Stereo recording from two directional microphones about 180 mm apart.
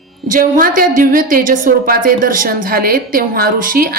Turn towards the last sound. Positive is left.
turn(degrees=-50)  # may be behind; listen again after turning